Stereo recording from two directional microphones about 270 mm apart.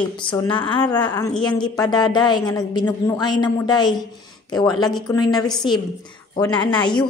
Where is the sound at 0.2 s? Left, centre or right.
Centre.